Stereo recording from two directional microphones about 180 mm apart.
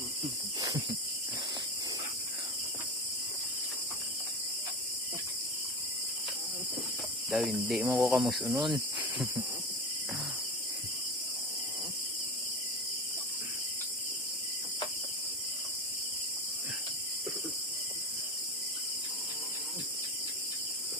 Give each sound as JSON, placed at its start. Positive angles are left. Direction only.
{"t": 7.3, "sound": "speech", "side_deg": 0}
{"t": 8.6, "sound": "speech", "side_deg": -25}